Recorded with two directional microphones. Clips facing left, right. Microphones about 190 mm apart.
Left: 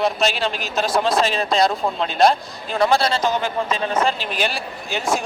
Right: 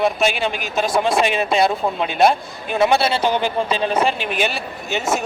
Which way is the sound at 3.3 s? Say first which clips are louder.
Right 2 dB; 20° right (ahead or behind).